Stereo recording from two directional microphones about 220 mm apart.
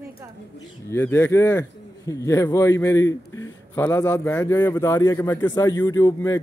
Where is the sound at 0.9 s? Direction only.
10° left (ahead or behind).